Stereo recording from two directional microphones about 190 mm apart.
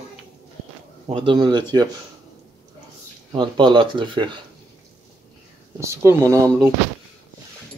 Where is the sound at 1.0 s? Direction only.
25° right (ahead or behind).